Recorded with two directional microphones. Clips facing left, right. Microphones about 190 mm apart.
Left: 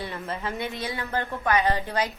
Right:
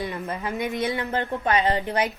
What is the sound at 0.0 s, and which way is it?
A woman's voice, 15° right (ahead or behind).